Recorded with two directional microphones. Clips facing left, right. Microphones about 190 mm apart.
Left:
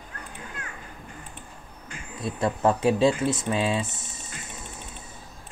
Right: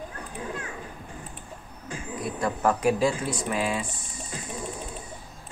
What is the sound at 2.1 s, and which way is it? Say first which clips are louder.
Speech: left 2 dB; 25° left (ahead or behind).